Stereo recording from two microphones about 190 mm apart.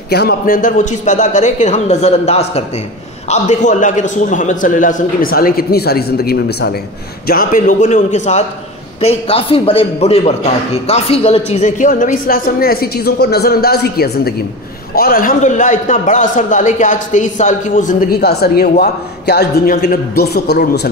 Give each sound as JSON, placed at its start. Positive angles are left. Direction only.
{"t": 0.1, "sound": "a man's voice", "side_deg": 55}